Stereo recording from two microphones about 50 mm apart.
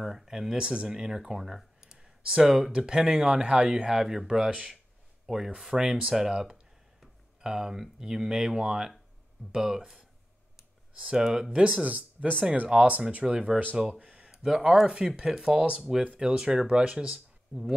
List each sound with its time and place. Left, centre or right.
0.0 s speech: centre
11.1 s speech: centre
11.8 s speech: right
14.3 s speech: centre